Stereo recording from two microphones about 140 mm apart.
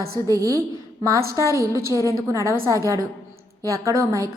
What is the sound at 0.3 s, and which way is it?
A woman's voice, 25° right (ahead or behind).